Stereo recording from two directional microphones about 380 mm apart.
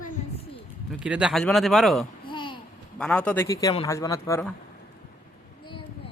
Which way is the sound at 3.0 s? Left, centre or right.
Centre.